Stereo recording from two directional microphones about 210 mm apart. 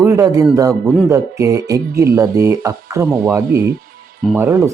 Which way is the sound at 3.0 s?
5° right (ahead or behind).